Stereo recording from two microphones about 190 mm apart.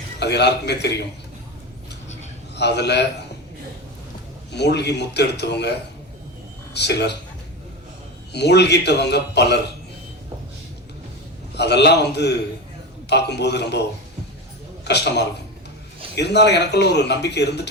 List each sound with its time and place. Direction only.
0.2 s speech: 60° left (ahead or behind)
2.6 s speech: 65° left (ahead or behind)
4.5 s speech: 60° left (ahead or behind)
6.7 s speech: 60° left (ahead or behind)
8.3 s speech: 60° left (ahead or behind)
11.5 s speech: 60° left (ahead or behind)
14.8 s speech: 60° left (ahead or behind)